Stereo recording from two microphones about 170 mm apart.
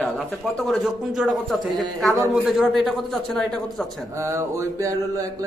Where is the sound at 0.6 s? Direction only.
Centre (ahead or behind).